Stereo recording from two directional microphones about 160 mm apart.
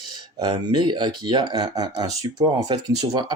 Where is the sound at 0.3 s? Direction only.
25° right (ahead or behind).